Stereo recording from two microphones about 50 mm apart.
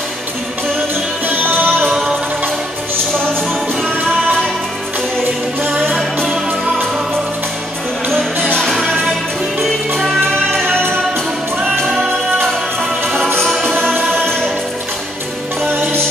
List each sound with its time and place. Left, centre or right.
1.2 s music: right
5.7 s music: right
8.6 s music: centre
14.1 s music: centre
15.6 s music: right